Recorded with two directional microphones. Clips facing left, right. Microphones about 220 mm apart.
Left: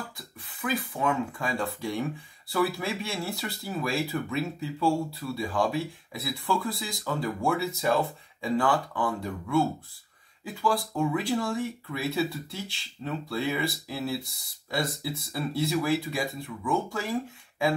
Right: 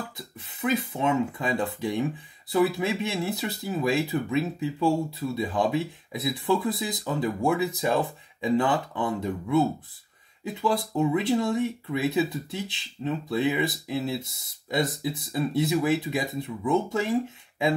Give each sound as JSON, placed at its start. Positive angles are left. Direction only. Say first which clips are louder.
{"t": 0.6, "sound": "speech", "louder": "right 4 dB", "side_deg": -25}